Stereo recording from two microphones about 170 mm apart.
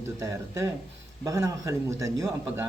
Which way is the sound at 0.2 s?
20° right (ahead or behind).